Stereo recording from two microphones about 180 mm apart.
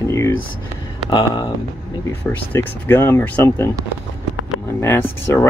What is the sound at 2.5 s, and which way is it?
Speech, 10° left (ahead or behind).